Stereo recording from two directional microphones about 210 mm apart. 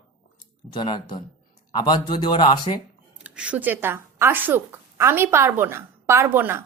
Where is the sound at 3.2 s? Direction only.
5° right (ahead or behind).